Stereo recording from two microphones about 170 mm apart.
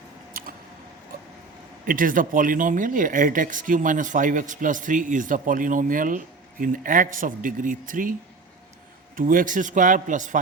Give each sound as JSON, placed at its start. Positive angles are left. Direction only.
{"t": 0.4, "sound": "a sound", "side_deg": -55}
{"t": 1.9, "sound": "speech", "side_deg": -55}
{"t": 9.1, "sound": "speech", "side_deg": -55}